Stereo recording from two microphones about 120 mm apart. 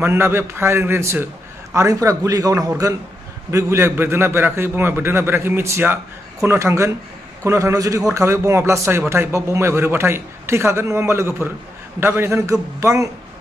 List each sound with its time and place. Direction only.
0.0 s speech: 20° right (ahead or behind)